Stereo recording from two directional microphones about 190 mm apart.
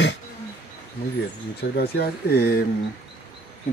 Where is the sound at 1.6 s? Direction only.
60° left (ahead or behind).